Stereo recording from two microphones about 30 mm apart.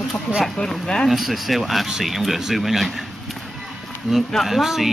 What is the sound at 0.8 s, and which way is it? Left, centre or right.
Speech, left.